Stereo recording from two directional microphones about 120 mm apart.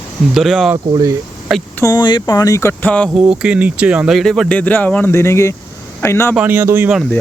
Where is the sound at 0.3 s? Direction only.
Centre (ahead or behind).